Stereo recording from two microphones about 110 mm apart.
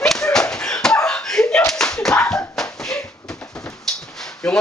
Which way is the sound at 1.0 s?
5° left (ahead or behind).